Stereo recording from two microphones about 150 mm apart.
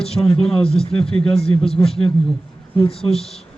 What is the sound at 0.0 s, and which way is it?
A man's voice, 5° left (ahead or behind).